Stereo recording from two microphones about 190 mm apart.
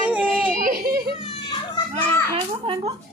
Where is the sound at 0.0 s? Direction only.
10° right (ahead or behind).